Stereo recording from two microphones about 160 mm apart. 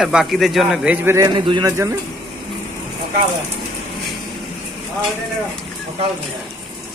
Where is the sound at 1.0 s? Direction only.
20° right (ahead or behind).